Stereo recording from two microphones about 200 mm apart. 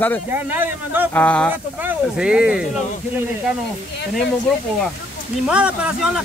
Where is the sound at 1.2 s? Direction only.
5° left (ahead or behind).